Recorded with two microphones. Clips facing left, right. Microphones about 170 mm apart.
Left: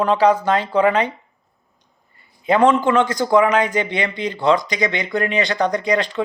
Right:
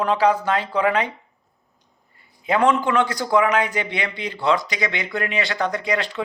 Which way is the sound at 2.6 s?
25° left (ahead or behind).